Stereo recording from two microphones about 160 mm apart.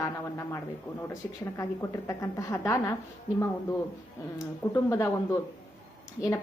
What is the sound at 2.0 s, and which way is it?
Speech, 20° left (ahead or behind).